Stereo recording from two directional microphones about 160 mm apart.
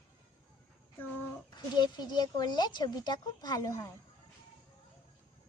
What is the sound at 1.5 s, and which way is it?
Speech, 25° left (ahead or behind).